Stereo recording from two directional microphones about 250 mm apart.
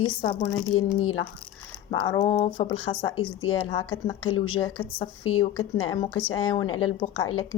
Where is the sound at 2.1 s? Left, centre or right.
Left.